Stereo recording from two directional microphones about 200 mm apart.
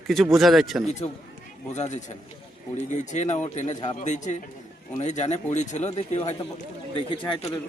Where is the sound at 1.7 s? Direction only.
35° left (ahead or behind).